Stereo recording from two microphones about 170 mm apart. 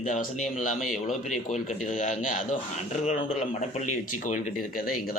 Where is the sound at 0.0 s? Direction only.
45° left (ahead or behind).